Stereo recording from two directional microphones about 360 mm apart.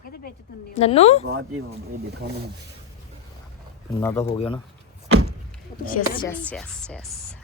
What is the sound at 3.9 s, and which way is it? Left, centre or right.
Speech, centre.